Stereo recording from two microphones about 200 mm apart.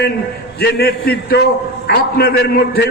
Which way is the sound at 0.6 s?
50° left (ahead or behind).